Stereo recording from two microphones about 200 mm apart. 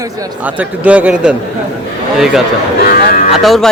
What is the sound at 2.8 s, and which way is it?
Speech, 45° left (ahead or behind).